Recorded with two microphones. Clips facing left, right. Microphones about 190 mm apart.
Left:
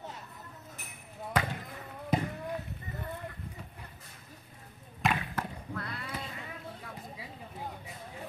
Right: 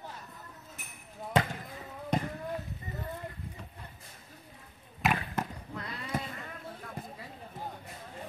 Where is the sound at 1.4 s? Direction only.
25° right (ahead or behind).